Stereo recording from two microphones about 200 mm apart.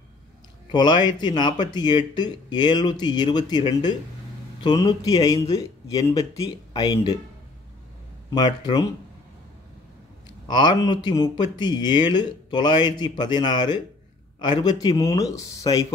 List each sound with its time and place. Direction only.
0.7 s a man's voice: 20° left (ahead or behind)
8.3 s speech: 20° left (ahead or behind)
10.5 s a man's voice: 20° left (ahead or behind)